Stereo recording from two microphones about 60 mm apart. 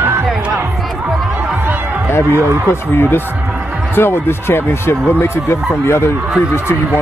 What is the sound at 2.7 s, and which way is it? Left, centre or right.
Speech, left.